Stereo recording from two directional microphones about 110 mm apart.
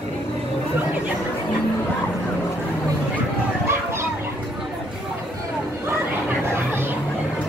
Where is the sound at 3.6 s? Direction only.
20° right (ahead or behind).